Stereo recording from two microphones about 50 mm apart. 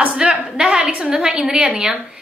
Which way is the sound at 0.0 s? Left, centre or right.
Right.